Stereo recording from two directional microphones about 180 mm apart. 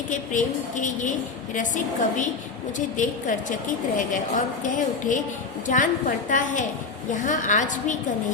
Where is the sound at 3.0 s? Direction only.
45° left (ahead or behind).